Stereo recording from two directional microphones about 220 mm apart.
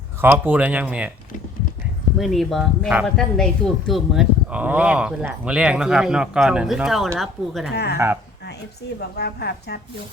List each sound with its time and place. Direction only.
0.2 s speech: 10° right (ahead or behind)
2.1 s speech: centre (ahead or behind)
7.7 s a woman's voice: 50° left (ahead or behind)
7.9 s speech: 10° right (ahead or behind)
9.1 s a woman's voice: 50° left (ahead or behind)